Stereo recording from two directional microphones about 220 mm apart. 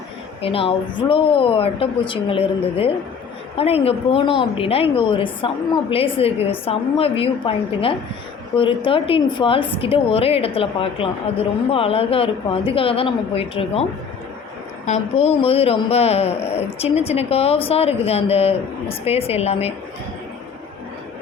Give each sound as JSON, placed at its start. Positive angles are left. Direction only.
{"t": 0.4, "sound": "a woman's voice", "side_deg": 25}
{"t": 14.8, "sound": "a woman's voice", "side_deg": 30}